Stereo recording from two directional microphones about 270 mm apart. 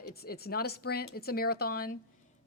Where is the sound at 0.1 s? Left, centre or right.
Left.